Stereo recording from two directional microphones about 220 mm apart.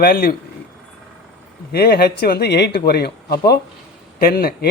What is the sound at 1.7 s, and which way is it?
Speech, 45° left (ahead or behind).